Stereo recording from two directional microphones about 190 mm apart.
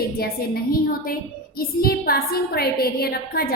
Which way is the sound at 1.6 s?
50° left (ahead or behind).